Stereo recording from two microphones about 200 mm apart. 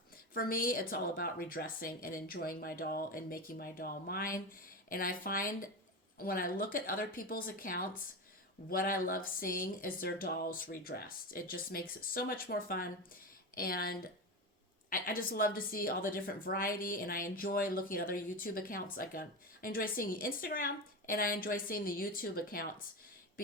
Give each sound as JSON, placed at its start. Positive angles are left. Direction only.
{"t": 0.3, "sound": "a woman's voice", "side_deg": 45}